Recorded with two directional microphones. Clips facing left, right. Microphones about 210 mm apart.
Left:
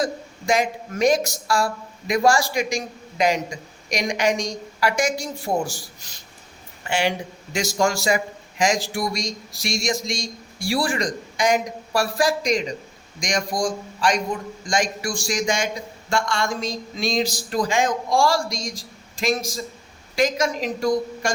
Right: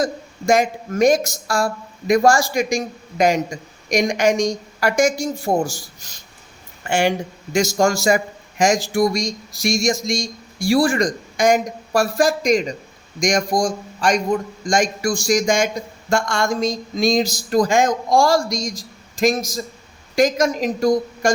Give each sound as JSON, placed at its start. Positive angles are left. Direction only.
{"t": 0.0, "sound": "speech", "side_deg": -45}